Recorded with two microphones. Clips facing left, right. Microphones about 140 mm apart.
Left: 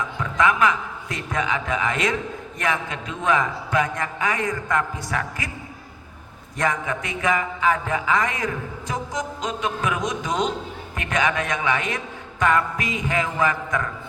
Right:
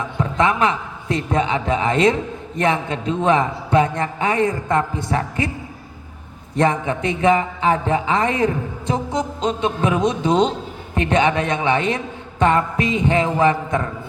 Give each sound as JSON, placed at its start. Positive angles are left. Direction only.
{"t": 0.2, "sound": "speech", "side_deg": -30}
{"t": 6.6, "sound": "speech", "side_deg": -30}